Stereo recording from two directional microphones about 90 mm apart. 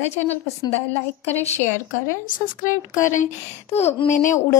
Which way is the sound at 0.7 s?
25° left (ahead or behind).